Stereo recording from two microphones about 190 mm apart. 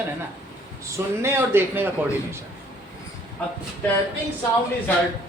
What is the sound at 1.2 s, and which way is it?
Speech, 10° right (ahead or behind).